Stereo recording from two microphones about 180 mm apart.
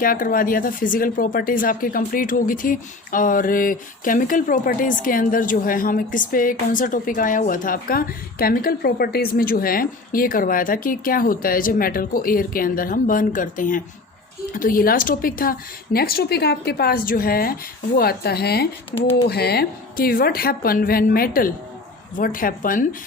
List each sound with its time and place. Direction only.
0.0 s speech: 50° left (ahead or behind)